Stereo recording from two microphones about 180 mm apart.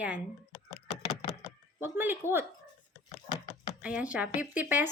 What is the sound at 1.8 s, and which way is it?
Speech, 10° right (ahead or behind).